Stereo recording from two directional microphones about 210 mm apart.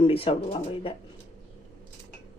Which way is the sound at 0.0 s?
25° left (ahead or behind).